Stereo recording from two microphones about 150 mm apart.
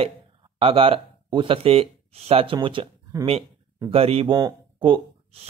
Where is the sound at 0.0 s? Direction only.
40° right (ahead or behind).